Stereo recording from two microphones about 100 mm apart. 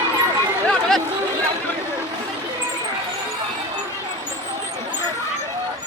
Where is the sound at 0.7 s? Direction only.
5° left (ahead or behind).